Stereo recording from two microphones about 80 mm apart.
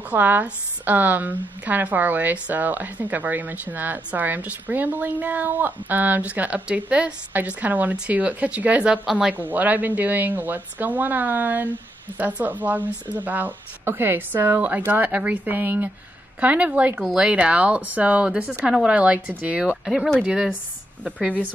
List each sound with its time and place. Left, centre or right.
0.1 s a woman's voice: right
19.8 s speech: centre